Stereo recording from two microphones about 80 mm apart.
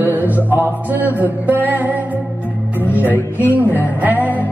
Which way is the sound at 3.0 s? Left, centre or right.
Right.